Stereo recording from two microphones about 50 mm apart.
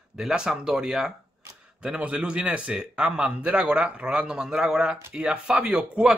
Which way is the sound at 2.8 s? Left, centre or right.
Centre.